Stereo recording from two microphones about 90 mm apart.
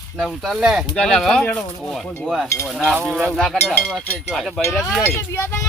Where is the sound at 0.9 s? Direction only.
10° left (ahead or behind).